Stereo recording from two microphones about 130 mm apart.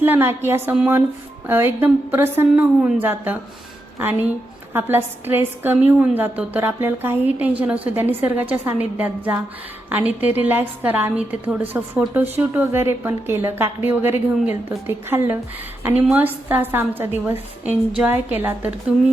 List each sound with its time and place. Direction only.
0.0 s a woman's voice: 15° right (ahead or behind)